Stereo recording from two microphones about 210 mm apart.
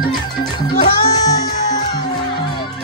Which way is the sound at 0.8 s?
20° left (ahead or behind).